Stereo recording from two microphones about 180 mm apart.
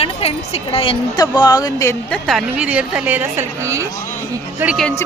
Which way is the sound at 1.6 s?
15° left (ahead or behind).